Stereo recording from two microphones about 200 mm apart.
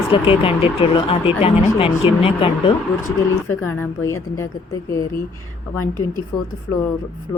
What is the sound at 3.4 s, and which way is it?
A woman's voice, 10° left (ahead or behind).